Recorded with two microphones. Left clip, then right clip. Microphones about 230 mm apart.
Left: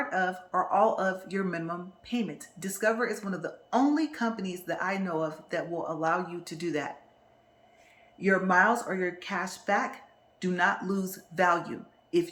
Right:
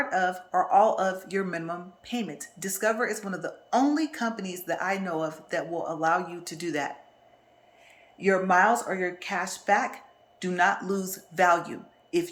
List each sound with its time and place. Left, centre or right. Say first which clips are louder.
0.0 s speech: right 3 dB; centre
8.2 s speech: right 2 dB; centre